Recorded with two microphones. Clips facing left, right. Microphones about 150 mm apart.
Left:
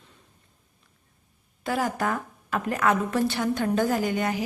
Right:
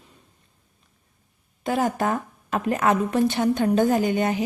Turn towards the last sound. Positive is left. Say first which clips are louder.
# right 4 dB
turn(degrees=-20)  # may be behind; listen again after turning